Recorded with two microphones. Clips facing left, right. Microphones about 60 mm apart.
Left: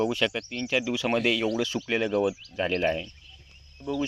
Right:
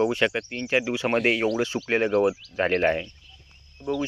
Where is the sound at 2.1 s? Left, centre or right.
Right.